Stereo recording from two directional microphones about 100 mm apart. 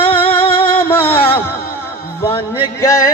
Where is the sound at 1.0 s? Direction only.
20° left (ahead or behind).